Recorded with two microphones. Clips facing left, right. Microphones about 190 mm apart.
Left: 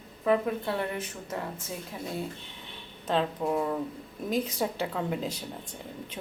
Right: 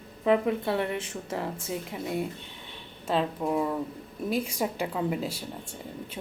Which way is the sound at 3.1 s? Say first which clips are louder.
Right 1 dB; centre (ahead or behind).